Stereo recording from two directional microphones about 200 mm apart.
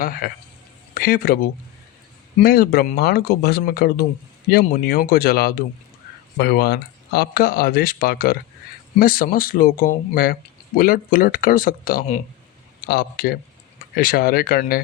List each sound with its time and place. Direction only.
0.2 s speech: 50° left (ahead or behind)
2.4 s speech: 50° left (ahead or behind)